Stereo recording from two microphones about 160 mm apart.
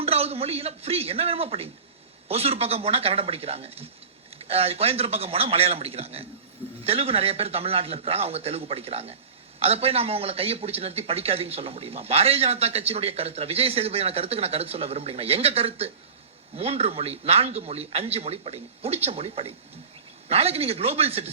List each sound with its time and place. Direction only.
0.0 s a man's voice: 40° right (ahead or behind)